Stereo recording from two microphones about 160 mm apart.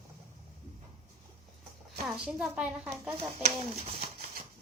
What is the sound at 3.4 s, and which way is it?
Speech, 35° right (ahead or behind).